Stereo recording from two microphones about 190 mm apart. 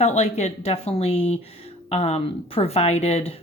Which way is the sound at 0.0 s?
35° left (ahead or behind).